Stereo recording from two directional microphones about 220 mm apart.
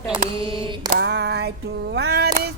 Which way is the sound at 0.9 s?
50° right (ahead or behind).